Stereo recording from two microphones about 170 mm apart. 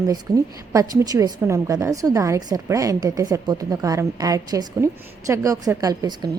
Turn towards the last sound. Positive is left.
turn(degrees=-25)  # may be behind; listen again after turning